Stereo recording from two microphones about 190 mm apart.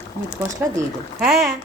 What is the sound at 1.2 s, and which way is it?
Speech, centre (ahead or behind).